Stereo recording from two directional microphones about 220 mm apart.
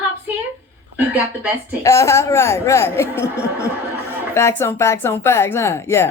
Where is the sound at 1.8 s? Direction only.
15° left (ahead or behind).